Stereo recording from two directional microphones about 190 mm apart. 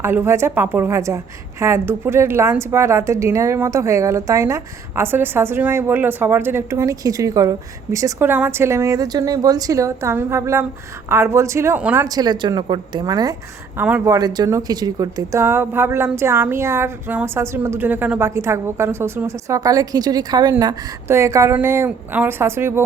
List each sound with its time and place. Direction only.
0.0 s a woman's voice: 10° right (ahead or behind)
12.0 s a woman's voice: 20° right (ahead or behind)